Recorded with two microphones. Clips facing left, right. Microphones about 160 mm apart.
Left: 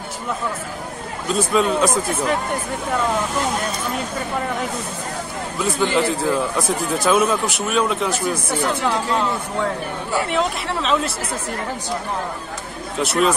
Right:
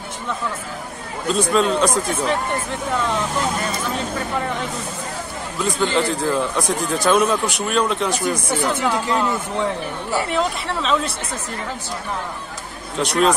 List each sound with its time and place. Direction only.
1.3 s speech: 5° left (ahead or behind)
5.6 s speech: 5° left (ahead or behind)
13.0 s speech: 5° left (ahead or behind)